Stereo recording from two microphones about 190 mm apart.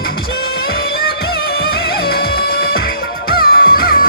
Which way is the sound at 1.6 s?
55° left (ahead or behind).